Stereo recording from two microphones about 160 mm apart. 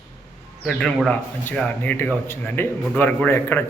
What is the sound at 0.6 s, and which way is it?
A man's voice, 5° left (ahead or behind).